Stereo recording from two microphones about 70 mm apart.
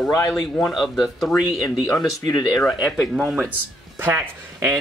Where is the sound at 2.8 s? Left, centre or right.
Centre.